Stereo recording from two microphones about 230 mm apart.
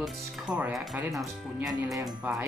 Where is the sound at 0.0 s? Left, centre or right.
Centre.